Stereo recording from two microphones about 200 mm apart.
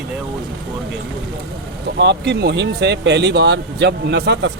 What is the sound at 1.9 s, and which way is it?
Speech, 60° right (ahead or behind).